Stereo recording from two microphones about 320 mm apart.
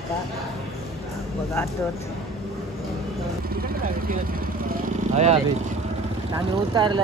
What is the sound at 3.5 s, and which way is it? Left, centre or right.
Vehicle, right.